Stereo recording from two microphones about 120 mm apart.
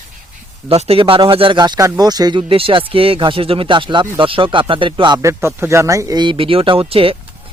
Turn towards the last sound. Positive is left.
turn(degrees=-50)  # may be behind; listen again after turning